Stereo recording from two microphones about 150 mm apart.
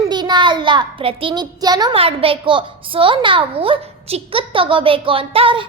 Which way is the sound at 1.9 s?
40° right (ahead or behind).